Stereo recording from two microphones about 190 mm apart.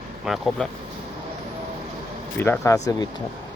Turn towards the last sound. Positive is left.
turn(degrees=15)  # may be behind; listen again after turning